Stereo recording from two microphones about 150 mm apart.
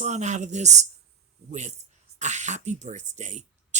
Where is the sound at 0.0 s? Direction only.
50° right (ahead or behind).